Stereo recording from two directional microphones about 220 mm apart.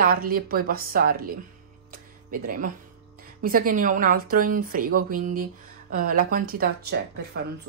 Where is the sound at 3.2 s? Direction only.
40° right (ahead or behind).